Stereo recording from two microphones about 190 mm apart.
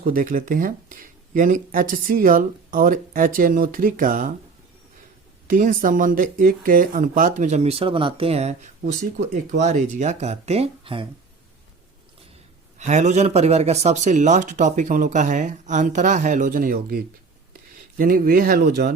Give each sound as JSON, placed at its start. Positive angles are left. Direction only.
{"t": 0.0, "sound": "speech", "side_deg": -45}
{"t": 5.5, "sound": "speech", "side_deg": -45}
{"t": 12.8, "sound": "speech", "side_deg": -40}